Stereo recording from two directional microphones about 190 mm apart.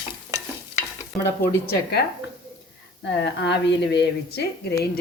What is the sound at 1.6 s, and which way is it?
Speech, 60° left (ahead or behind).